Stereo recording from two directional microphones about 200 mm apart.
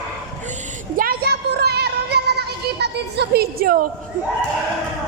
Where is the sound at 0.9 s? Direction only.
45° right (ahead or behind).